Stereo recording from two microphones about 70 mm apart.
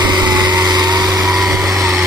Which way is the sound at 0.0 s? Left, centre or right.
Right.